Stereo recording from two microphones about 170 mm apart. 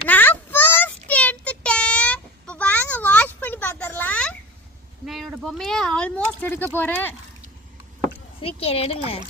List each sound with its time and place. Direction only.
0.1 s child singing: 10° left (ahead or behind)
5.0 s a sound: centre (ahead or behind)
6.7 s speech: 10° left (ahead or behind)
8.4 s speech: 35° left (ahead or behind)